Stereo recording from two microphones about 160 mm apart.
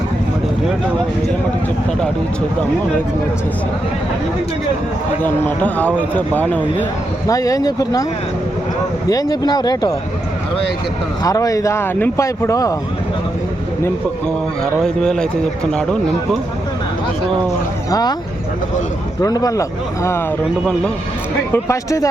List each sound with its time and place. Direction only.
5.2 s speech: 10° left (ahead or behind)
7.3 s speech: 20° left (ahead or behind)
9.0 s speech: 20° left (ahead or behind)
11.2 s speech: 20° left (ahead or behind)
14.6 s speech: 5° left (ahead or behind)
19.2 s speech: 25° left (ahead or behind)
21.5 s speech: 20° left (ahead or behind)